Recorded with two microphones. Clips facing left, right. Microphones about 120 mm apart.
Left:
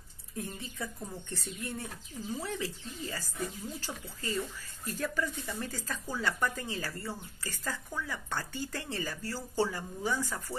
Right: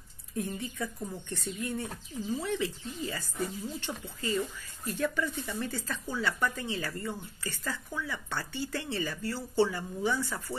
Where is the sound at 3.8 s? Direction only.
35° left (ahead or behind).